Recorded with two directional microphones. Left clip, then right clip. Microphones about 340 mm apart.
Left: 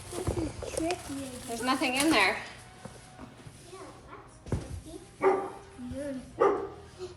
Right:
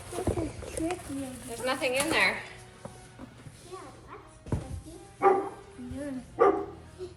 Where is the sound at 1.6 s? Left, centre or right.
Centre.